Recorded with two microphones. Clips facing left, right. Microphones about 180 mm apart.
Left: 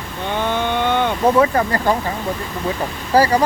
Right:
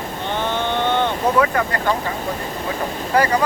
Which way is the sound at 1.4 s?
30° left (ahead or behind).